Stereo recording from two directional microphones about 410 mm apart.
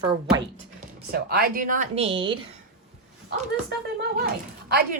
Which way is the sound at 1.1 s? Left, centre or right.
Right.